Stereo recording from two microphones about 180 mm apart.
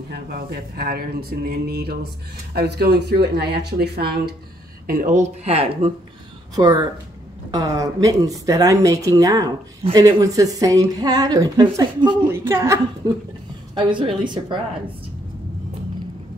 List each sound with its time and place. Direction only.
0.1 s speech: 60° right (ahead or behind)
4.8 s speech: 50° right (ahead or behind)
6.5 s speech: 25° right (ahead or behind)
12.3 s a woman's voice: 15° right (ahead or behind)
13.7 s speech: 25° right (ahead or behind)